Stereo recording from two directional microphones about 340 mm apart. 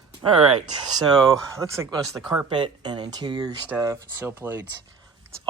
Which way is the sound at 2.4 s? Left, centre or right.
Centre.